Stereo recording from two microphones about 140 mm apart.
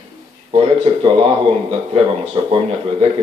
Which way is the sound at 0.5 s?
45° right (ahead or behind).